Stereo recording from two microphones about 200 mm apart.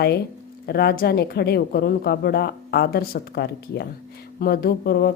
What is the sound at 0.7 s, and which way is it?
Speech, 50° left (ahead or behind).